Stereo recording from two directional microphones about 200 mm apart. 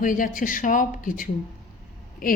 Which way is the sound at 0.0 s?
45° left (ahead or behind).